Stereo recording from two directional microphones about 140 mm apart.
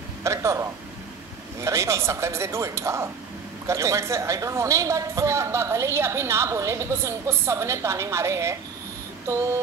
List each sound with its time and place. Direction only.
0.2 s a woman's voice: 20° right (ahead or behind)